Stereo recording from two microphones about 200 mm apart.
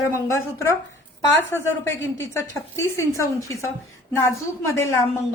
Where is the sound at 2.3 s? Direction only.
15° left (ahead or behind).